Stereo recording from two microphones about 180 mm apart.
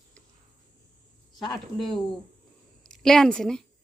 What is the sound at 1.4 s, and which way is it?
Speech, 25° left (ahead or behind).